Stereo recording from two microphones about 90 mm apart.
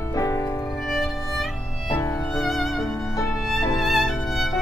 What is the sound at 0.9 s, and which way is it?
Music, centre (ahead or behind).